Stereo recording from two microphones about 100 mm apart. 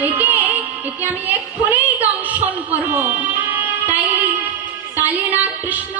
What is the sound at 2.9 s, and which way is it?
Music, 15° right (ahead or behind).